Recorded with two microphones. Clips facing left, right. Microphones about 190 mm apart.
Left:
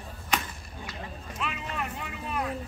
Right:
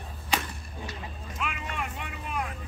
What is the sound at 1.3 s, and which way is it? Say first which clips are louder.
Vehicle: even; centre (ahead or behind).